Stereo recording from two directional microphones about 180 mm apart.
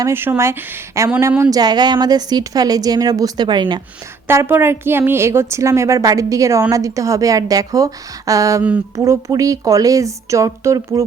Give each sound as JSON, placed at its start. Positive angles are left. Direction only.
{"t": 0.0, "sound": "a woman's voice", "side_deg": -10}
{"t": 4.3, "sound": "a woman's voice", "side_deg": -10}